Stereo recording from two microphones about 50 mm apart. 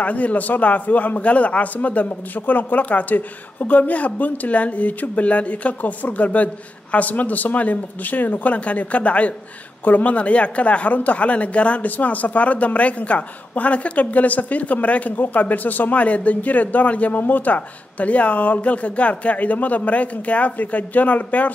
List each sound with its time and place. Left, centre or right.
0.0 s a man's voice: left